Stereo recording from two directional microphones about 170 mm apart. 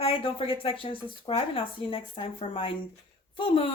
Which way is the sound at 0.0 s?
35° left (ahead or behind).